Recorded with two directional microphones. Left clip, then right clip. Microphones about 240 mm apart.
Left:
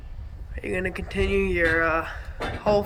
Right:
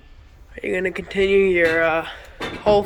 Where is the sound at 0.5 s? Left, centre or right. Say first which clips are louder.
Right 5 dB; centre.